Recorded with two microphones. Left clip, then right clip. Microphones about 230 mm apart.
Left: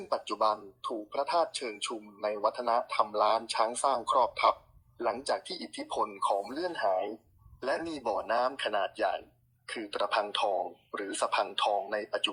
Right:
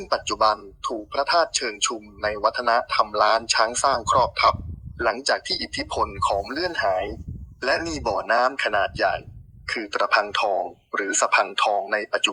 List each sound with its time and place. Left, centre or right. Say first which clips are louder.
0.0 s a man's voice: right 8 dB; centre
4.0 s a man's voice: right 7 dB; right
4.9 s a man's voice: right 9 dB; centre
7.8 s a man's voice: right 8 dB; right